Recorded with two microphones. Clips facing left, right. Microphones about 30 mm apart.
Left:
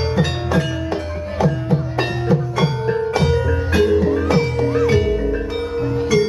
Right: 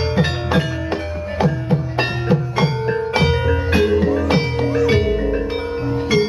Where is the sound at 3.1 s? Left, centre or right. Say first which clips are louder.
Right 1 dB; right.